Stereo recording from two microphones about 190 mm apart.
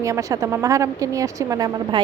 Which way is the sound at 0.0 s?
15° right (ahead or behind).